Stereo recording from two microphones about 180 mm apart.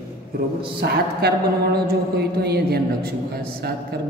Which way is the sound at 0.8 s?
60° right (ahead or behind).